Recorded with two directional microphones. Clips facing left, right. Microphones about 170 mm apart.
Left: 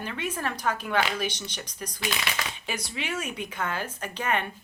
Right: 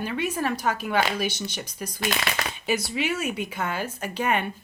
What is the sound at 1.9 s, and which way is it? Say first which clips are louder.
Speech: right 4 dB; 50° right (ahead or behind).